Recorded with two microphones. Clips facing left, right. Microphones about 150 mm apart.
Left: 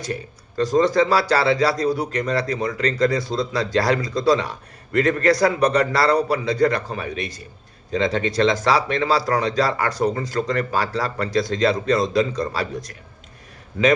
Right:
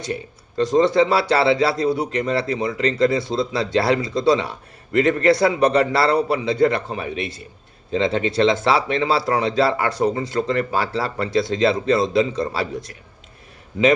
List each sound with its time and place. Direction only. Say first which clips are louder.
0.0 s speech: right 1 dB; 25° right (ahead or behind)